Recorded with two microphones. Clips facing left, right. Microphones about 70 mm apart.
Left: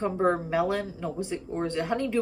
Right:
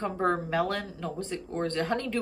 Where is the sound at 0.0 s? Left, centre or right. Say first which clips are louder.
Left 3 dB; centre.